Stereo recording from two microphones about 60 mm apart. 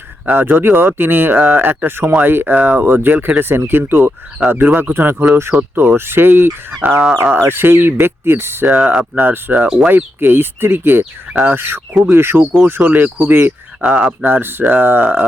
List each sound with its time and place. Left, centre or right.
0.3 s speech: right
2.6 s speech: right
8.7 s speech: centre
9.1 s speech: right
9.6 s speech: centre
9.9 s speech: right
12.8 s speech: right
13.8 s speech: right
14.3 s speech: right